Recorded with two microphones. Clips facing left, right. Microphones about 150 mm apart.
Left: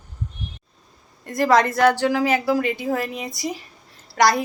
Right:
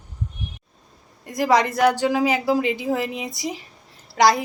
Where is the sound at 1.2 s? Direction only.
15° right (ahead or behind).